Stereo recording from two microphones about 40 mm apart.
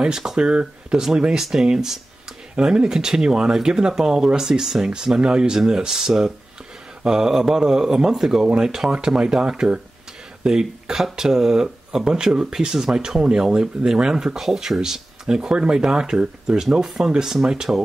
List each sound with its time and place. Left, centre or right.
0.0 s speech: centre
16.8 s speech: centre